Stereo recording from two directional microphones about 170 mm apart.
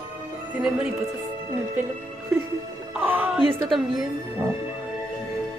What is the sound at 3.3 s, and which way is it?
Speech, centre (ahead or behind).